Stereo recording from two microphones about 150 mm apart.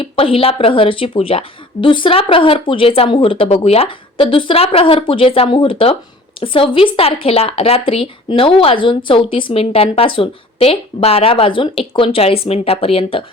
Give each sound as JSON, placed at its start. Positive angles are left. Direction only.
{"t": 0.0, "sound": "speech", "side_deg": 35}